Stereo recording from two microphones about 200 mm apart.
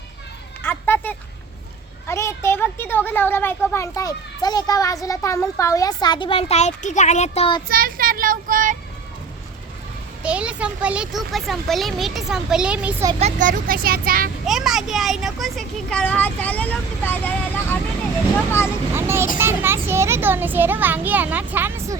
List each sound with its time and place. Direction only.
0.6 s a sound: 10° left (ahead or behind)
2.0 s speech: 15° left (ahead or behind); by 7.6 s 30° left (ahead or behind)
7.7 s speech: 45° right (ahead or behind)
10.2 s speech: 5° right (ahead or behind)
13.1 s speech: 35° right (ahead or behind)
14.4 s speech: centre (ahead or behind)
18.9 s a child's voice: 10° right (ahead or behind)